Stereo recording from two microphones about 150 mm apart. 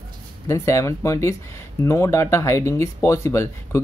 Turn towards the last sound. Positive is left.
turn(degrees=20)  # may be behind; listen again after turning